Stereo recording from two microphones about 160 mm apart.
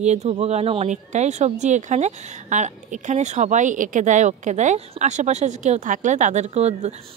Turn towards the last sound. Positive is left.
turn(degrees=-40)  # may be behind; listen again after turning